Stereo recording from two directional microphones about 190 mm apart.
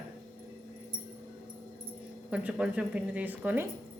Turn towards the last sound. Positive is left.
turn(degrees=-10)  # may be behind; listen again after turning